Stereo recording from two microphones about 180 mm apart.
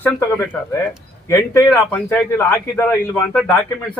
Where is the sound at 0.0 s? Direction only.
10° left (ahead or behind).